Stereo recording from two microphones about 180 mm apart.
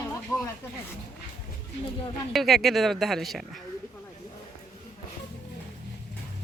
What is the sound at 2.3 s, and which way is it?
Speech, centre (ahead or behind).